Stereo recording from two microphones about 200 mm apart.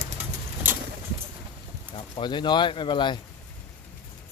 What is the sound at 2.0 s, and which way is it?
Speech, 25° left (ahead or behind).